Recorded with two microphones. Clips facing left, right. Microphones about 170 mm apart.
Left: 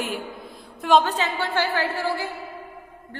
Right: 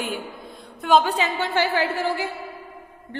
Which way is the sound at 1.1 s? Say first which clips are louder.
Right 2 dB; 15° right (ahead or behind).